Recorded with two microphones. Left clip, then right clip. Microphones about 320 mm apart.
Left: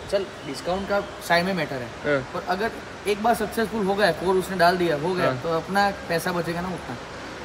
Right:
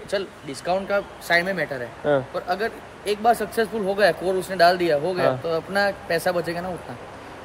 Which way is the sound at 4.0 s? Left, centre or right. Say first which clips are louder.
Right 2 dB; right.